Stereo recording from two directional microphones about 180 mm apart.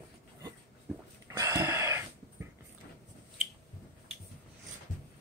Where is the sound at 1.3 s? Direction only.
20° right (ahead or behind).